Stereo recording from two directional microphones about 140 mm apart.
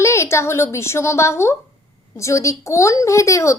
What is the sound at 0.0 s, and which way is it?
A woman's voice, 20° left (ahead or behind).